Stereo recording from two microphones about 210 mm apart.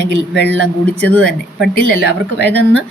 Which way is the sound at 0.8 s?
5° left (ahead or behind).